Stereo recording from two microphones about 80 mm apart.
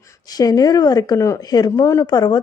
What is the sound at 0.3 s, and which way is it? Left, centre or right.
A woman's voice, left.